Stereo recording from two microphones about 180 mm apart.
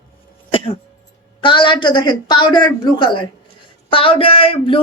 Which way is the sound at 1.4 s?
25° left (ahead or behind).